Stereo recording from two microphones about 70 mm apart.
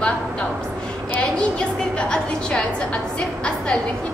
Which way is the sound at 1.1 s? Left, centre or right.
Centre.